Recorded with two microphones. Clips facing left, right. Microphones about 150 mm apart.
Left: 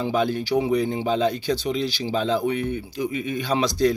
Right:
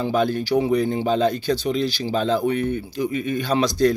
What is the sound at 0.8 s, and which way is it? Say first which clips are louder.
Speech: right 2 dB; 15° left (ahead or behind).